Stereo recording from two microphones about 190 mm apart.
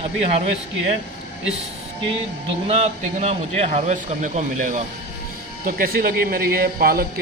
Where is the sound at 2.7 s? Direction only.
35° right (ahead or behind).